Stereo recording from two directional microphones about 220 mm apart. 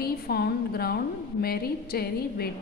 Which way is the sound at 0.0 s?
45° left (ahead or behind).